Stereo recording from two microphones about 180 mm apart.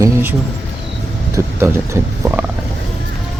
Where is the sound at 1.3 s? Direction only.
15° right (ahead or behind).